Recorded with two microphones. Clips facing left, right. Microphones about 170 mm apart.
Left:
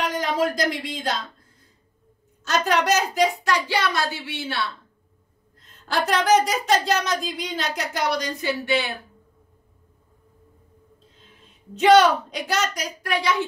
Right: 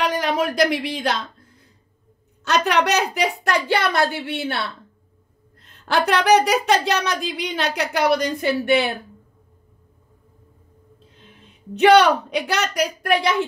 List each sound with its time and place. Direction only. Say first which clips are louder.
0.0 s speech: right 2 dB; 65° right (ahead or behind)
2.4 s a woman's voice: right 2 dB; 65° right (ahead or behind)
11.7 s a woman's voice: right 2 dB; 65° right (ahead or behind)